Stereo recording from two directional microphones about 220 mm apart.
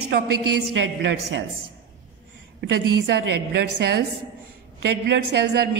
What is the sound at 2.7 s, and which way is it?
Speech, 45° right (ahead or behind).